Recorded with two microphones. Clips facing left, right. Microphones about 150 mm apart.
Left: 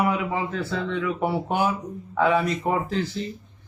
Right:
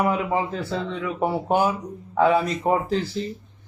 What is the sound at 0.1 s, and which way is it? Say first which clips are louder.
Speech: right 2 dB; 35° right (ahead or behind).